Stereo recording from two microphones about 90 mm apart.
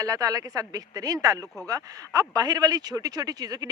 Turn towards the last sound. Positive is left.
turn(degrees=-45)  # may be behind; listen again after turning